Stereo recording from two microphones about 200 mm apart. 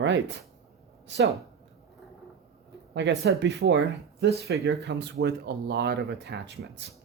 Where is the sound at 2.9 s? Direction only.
60° right (ahead or behind).